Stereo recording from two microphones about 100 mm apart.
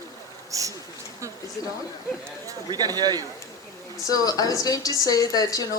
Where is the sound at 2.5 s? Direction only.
40° right (ahead or behind).